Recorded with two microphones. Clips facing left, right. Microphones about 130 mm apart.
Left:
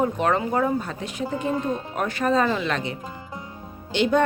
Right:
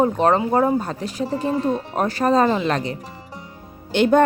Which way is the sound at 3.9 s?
50° right (ahead or behind).